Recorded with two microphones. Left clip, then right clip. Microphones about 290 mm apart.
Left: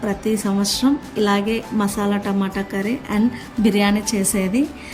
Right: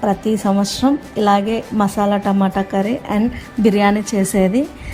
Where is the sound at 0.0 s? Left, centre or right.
Centre.